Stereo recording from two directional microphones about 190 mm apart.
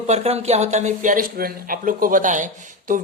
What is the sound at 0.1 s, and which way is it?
Speech, 35° right (ahead or behind).